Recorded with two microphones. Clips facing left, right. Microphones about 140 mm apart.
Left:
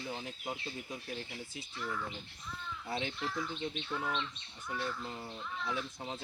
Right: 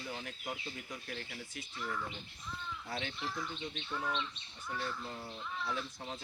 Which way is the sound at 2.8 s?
20° left (ahead or behind).